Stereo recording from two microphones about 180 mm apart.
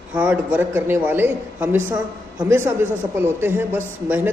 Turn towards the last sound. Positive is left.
turn(degrees=-10)  # may be behind; listen again after turning